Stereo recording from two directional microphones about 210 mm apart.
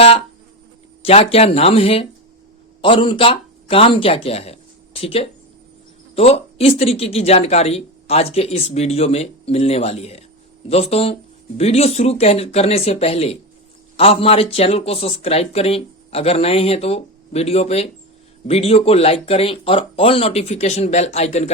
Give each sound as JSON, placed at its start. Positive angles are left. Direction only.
{"t": 1.0, "sound": "speech", "side_deg": 30}